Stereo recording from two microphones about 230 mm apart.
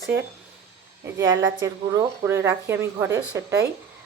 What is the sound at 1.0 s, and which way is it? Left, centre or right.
Speech, centre.